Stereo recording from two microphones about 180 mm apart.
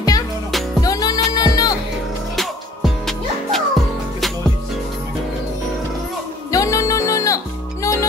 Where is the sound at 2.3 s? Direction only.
Centre (ahead or behind).